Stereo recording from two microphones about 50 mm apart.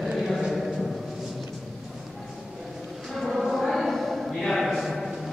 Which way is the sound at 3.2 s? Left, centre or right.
Centre.